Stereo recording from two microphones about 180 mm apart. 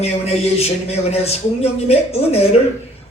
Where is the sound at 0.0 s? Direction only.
35° left (ahead or behind).